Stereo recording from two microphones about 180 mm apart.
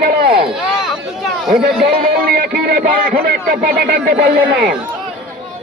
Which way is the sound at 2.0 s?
55° right (ahead or behind).